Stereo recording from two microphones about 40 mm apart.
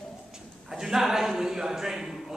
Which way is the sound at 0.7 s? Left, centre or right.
Centre.